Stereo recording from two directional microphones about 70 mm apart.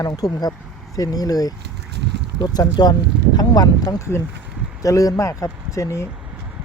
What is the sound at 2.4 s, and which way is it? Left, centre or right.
Speech, left.